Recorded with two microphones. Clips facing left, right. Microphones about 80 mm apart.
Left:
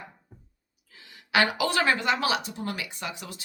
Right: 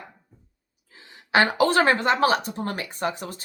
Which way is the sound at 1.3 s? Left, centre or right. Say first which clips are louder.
Right 5 dB; right.